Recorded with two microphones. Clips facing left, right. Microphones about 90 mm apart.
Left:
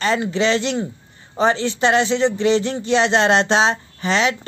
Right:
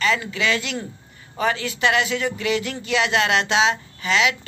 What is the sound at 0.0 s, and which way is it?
Speech, 35° left (ahead or behind).